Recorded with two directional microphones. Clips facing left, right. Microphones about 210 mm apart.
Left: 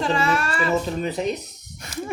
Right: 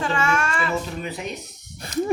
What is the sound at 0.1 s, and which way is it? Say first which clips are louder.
Child singing: left 1 dB; 35° left (ahead or behind).